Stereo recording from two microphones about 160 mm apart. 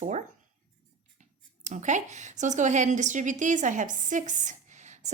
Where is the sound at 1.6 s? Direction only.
50° right (ahead or behind).